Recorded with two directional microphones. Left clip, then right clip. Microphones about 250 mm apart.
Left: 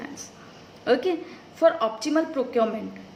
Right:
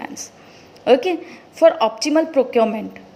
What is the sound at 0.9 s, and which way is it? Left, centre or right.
A woman's voice, right.